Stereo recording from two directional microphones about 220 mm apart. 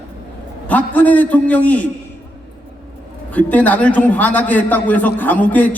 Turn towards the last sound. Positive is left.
turn(degrees=5)  # may be behind; listen again after turning